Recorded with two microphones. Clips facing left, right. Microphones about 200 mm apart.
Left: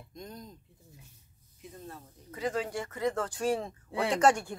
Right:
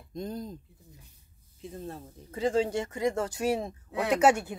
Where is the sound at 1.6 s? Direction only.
30° right (ahead or behind).